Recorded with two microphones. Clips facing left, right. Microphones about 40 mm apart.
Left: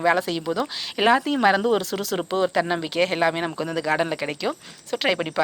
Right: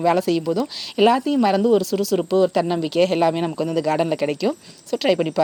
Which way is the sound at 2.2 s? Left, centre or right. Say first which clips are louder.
Right 4 dB; left.